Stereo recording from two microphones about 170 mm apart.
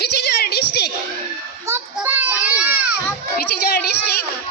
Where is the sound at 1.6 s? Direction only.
15° right (ahead or behind).